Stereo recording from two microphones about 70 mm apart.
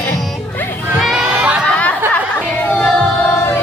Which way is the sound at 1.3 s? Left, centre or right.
Centre.